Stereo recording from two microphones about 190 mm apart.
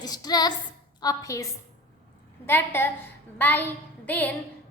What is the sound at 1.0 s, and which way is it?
Speech, 15° left (ahead or behind).